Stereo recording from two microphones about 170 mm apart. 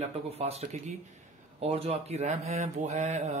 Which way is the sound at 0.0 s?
40° right (ahead or behind).